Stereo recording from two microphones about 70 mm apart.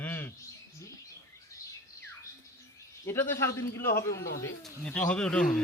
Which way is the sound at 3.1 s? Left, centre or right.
Left.